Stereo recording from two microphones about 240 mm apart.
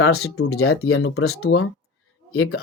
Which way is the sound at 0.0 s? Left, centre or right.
Left.